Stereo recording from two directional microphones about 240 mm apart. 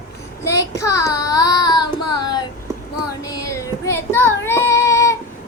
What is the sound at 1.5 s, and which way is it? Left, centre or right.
Child singing, centre.